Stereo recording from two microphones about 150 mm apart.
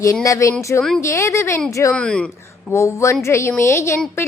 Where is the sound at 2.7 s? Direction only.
20° left (ahead or behind).